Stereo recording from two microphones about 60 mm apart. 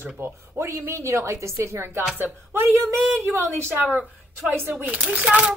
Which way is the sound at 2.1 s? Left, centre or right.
Right.